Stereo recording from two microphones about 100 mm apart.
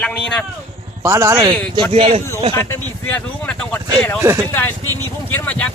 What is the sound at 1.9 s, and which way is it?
Speech, 80° right.